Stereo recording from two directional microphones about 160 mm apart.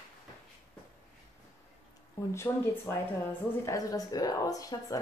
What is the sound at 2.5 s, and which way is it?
Speech, 15° left (ahead or behind).